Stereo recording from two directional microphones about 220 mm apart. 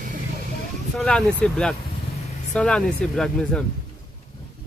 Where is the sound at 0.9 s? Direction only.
5° left (ahead or behind).